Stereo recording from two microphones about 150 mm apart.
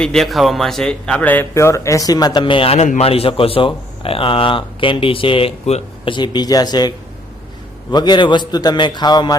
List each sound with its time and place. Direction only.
0.0 s speech: 5° left (ahead or behind); by 6.1 s 40° left (ahead or behind)
6.1 s a man's voice: 30° left (ahead or behind)